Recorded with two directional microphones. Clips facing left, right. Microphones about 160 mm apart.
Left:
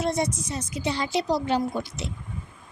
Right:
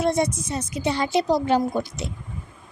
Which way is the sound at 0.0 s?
55° right (ahead or behind).